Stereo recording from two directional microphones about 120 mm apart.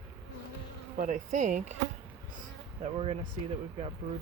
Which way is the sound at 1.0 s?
90° right.